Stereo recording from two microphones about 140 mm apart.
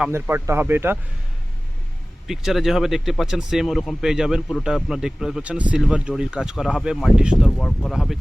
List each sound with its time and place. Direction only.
0.1 s speech: 15° right (ahead or behind)
2.2 s speech: centre (ahead or behind)